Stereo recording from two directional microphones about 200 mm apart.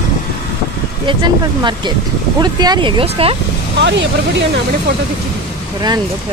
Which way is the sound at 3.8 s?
60° right (ahead or behind).